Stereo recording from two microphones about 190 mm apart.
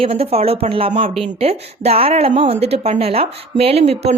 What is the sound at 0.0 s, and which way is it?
Speech, 30° right (ahead or behind).